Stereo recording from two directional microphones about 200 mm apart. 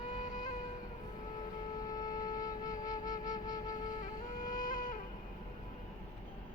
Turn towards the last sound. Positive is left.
turn(degrees=40)  # may be behind; listen again after turning